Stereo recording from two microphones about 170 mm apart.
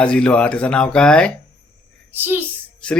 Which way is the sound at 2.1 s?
10° right (ahead or behind).